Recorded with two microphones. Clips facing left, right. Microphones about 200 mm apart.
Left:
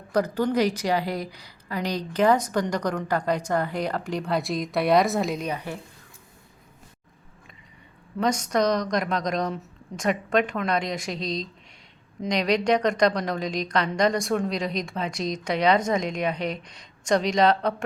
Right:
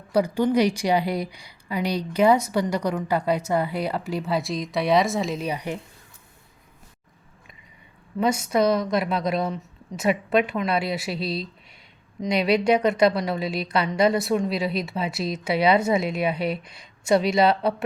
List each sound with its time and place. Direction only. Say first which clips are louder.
0.1 s a woman's voice: right 3 dB; 10° right (ahead or behind)
5.5 s a woman's voice: right 2 dB; 15° right (ahead or behind)
8.2 s a woman's voice: right 2 dB; 10° right (ahead or behind)